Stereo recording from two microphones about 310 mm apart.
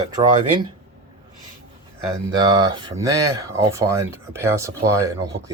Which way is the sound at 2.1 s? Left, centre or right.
Centre.